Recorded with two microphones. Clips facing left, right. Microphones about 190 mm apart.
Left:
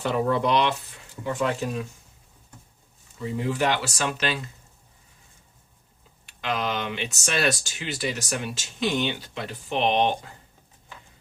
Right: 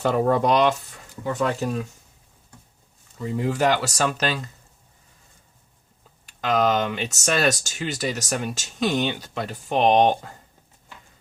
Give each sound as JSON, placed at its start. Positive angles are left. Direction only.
{"t": 0.0, "sound": "speech", "side_deg": -45}
{"t": 3.3, "sound": "speech", "side_deg": -40}
{"t": 6.2, "sound": "speech", "side_deg": -45}